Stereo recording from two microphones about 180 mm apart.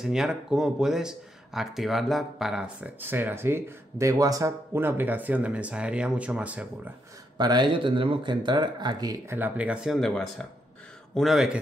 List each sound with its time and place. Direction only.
0.0 s speech: centre (ahead or behind)
7.3 s a man's voice: 25° right (ahead or behind); by 11.5 s centre (ahead or behind)